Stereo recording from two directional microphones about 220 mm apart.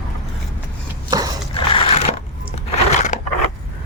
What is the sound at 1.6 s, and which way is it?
Crushing, 25° left (ahead or behind).